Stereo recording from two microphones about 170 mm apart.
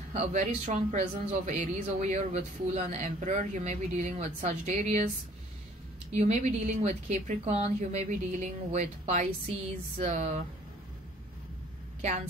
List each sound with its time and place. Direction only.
0.1 s speech: 45° right (ahead or behind)
6.1 s speech: 45° right (ahead or behind)
12.0 s a woman's voice: 40° right (ahead or behind)